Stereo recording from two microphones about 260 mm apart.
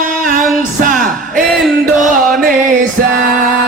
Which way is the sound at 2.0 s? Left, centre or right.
Right.